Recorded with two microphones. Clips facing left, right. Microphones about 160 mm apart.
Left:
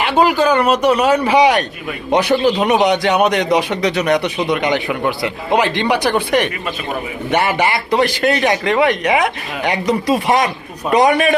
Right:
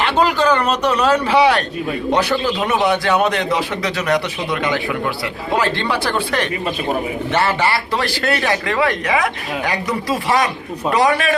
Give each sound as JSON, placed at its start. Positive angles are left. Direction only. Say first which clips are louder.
{"t": 0.0, "sound": "speech", "louder": "left 2 dB", "side_deg": 10}
{"t": 2.6, "sound": "a man's voice", "louder": "left 3 dB", "side_deg": 20}